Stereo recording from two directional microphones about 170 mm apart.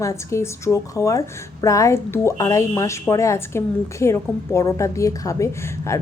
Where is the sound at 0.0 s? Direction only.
15° left (ahead or behind).